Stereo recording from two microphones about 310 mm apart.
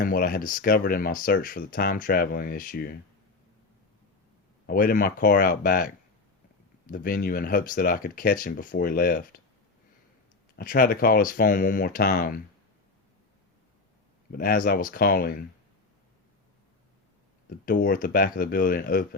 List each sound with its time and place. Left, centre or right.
0.0 s speech: left
4.6 s speech: left
10.6 s speech: left
14.3 s speech: left
17.7 s speech: left